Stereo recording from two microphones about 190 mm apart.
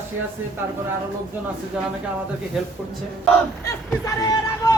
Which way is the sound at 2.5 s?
Centre (ahead or behind).